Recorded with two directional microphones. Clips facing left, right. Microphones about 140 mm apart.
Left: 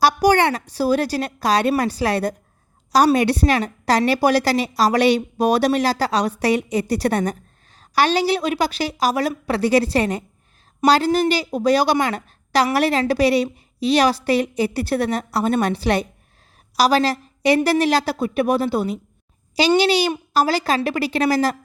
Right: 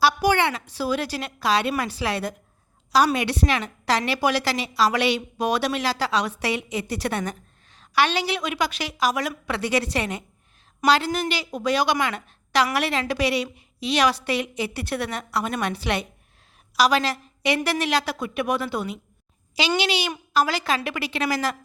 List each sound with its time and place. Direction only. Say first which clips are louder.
0.0 s a woman's voice: left 4 dB; 40° left (ahead or behind)